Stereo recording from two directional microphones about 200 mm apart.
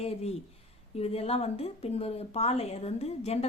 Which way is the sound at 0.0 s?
30° left (ahead or behind).